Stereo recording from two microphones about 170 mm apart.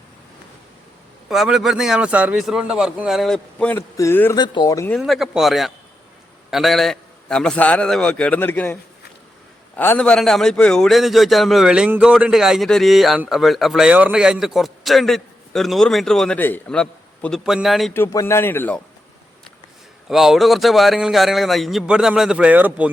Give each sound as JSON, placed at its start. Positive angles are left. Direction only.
{"t": 1.3, "sound": "a man's voice", "side_deg": 0}
{"t": 4.9, "sound": "a man's voice", "side_deg": 0}
{"t": 17.9, "sound": "speech", "side_deg": 15}
{"t": 20.1, "sound": "a man's voice", "side_deg": 0}